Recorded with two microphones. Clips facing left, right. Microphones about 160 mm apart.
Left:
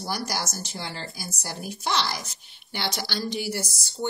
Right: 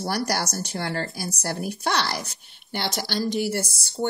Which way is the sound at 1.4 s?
60° right (ahead or behind).